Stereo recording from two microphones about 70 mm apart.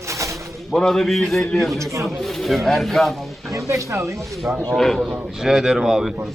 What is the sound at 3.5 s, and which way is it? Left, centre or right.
Speech, right.